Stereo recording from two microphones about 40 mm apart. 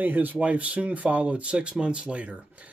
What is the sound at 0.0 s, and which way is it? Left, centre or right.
Speech, right.